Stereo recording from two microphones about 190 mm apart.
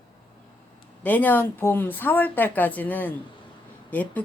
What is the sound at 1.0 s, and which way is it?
Speech, 10° left (ahead or behind).